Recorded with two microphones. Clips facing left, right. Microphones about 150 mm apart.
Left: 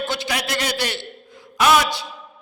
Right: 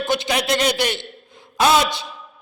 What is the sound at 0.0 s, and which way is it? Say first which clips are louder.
A man's voice: right 4 dB; 20° right (ahead or behind).